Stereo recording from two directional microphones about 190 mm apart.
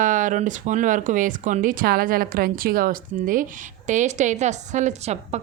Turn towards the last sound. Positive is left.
turn(degrees=-35)  # may be behind; listen again after turning